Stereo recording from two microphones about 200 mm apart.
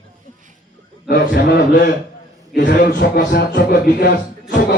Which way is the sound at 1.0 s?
50° left (ahead or behind).